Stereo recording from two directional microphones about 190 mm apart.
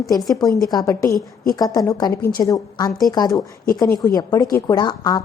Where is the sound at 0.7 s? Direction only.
20° left (ahead or behind).